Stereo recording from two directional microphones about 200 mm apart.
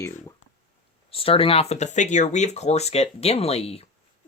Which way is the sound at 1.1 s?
25° left (ahead or behind).